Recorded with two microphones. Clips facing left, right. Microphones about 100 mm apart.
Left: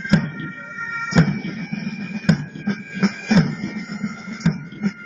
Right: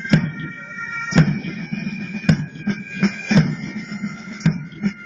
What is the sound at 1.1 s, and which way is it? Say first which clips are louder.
Music: right 1 dB; 15° left (ahead or behind).